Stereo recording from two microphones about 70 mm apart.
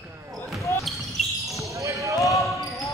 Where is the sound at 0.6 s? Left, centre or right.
Left.